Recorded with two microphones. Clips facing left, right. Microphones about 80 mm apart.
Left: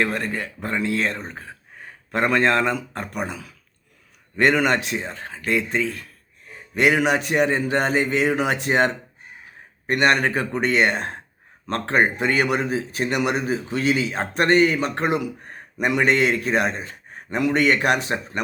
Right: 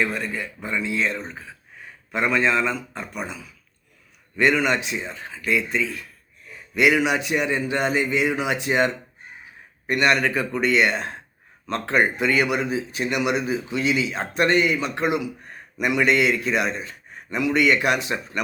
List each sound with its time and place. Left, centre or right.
0.0 s a man's voice: left
10.2 s speech: left
10.6 s a man's voice: left